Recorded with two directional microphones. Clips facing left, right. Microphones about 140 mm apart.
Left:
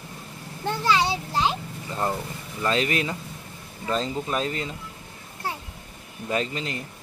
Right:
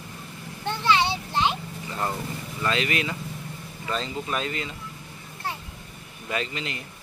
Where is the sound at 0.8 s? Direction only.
40° left (ahead or behind).